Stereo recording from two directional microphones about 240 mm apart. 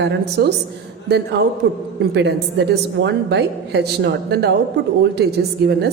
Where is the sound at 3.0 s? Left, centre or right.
Right.